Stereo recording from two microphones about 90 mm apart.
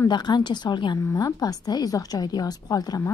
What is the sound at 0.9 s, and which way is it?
A woman's voice, 40° left (ahead or behind).